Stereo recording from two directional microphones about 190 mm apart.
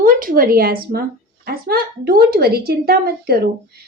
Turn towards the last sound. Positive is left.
turn(degrees=-55)  # may be behind; listen again after turning